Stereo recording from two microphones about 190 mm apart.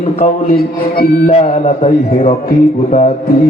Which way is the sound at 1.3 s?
35° left (ahead or behind).